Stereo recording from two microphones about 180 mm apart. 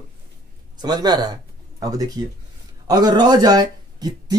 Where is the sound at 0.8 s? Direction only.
20° right (ahead or behind).